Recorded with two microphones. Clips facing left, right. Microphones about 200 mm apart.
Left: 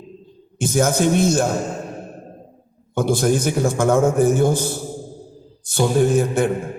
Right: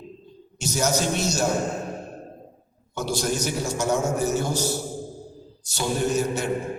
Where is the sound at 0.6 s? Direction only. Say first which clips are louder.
Left 7 dB; 55° left (ahead or behind).